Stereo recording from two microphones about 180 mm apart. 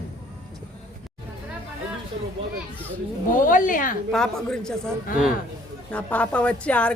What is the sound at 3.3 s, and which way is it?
Speech, 50° left (ahead or behind).